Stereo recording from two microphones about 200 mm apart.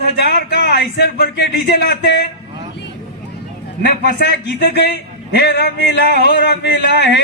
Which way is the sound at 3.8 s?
55° left (ahead or behind).